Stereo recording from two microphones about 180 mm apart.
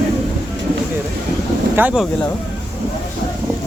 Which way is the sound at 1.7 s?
5° right (ahead or behind).